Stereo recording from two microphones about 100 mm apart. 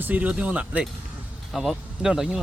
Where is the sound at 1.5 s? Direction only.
Centre (ahead or behind).